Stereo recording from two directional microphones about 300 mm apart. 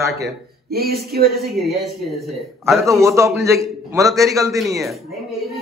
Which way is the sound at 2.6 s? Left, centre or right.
Centre.